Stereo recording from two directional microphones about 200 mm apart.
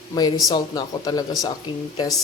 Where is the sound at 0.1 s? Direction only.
20° left (ahead or behind).